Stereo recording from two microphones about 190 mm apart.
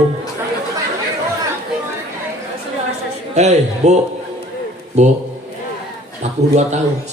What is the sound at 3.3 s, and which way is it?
Speech, 35° right (ahead or behind).